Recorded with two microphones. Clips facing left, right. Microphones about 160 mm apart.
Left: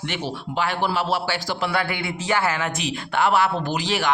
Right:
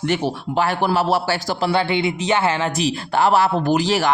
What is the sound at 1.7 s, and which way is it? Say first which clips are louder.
A man's voice: right 6 dB; 25° right (ahead or behind).